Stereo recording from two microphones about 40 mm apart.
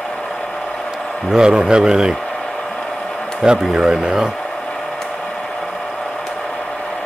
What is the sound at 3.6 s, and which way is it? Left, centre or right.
Speech, centre.